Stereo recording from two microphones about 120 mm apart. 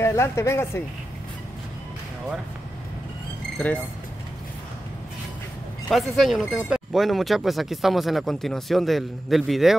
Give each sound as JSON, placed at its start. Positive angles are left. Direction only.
{"t": 0.0, "sound": "speech", "side_deg": 20}
{"t": 3.5, "sound": "speech", "side_deg": 10}
{"t": 5.9, "sound": "speech", "side_deg": 0}